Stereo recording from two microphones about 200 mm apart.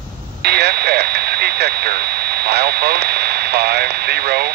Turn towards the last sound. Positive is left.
turn(degrees=-55)  # may be behind; listen again after turning